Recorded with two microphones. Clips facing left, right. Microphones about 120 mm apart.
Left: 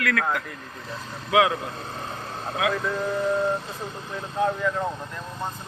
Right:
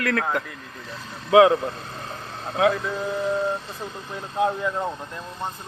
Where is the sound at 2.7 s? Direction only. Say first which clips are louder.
Left 1 dB; 5° right (ahead or behind).